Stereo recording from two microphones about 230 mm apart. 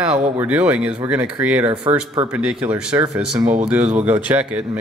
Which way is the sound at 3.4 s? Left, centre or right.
Right.